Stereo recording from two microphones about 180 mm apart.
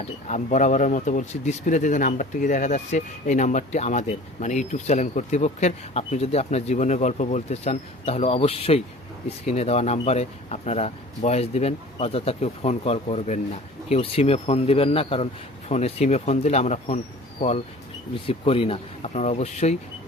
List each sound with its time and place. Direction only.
0.0 s speech: 40° left (ahead or behind)
18.3 s speech: 30° left (ahead or behind)